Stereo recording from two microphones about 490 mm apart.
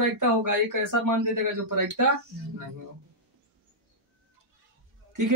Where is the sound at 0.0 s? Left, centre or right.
Right.